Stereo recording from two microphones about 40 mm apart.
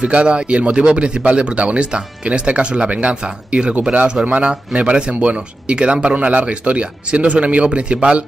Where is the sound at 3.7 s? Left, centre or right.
Right.